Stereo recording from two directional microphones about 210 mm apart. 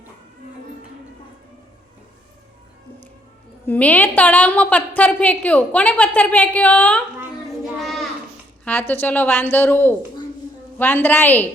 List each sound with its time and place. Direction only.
3.7 s a woman's voice: 10° left (ahead or behind)
7.8 s child singing: centre (ahead or behind)
8.6 s a woman's voice: 10° left (ahead or behind)